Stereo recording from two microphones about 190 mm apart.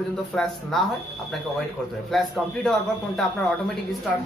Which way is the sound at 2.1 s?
Centre (ahead or behind).